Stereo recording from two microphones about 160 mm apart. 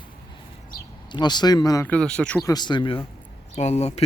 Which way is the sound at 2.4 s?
25° left (ahead or behind).